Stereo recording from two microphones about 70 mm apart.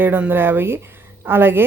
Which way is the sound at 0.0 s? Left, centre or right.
Right.